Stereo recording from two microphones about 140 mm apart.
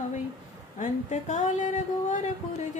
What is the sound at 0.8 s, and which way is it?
Speech, 60° left (ahead or behind).